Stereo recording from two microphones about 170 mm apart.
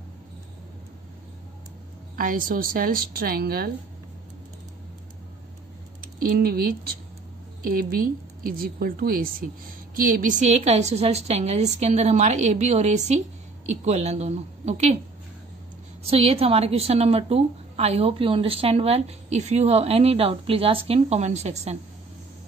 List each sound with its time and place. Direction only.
2.1 s a woman's voice: 55° right (ahead or behind)
5.9 s a woman's voice: 55° right (ahead or behind); by 15.0 s 40° right (ahead or behind)
16.0 s a woman's voice: 35° right (ahead or behind)